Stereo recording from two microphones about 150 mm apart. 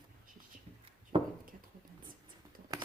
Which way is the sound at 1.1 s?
35° right (ahead or behind).